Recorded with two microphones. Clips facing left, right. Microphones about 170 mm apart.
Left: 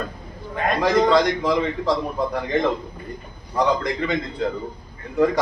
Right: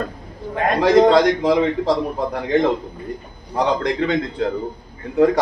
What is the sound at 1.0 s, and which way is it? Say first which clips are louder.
Speech: right 4 dB; 60° right (ahead or behind).